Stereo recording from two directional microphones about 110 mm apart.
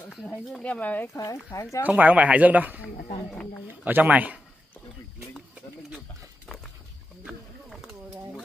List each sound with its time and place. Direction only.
0.5 s speech: 10° left (ahead or behind)
1.1 s speech: 30° left (ahead or behind)
1.8 s speech: 15° right (ahead or behind)
3.3 s speech: 10° left (ahead or behind)
3.6 s speech: 15° right (ahead or behind)
7.2 s a sound: 5° right (ahead or behind)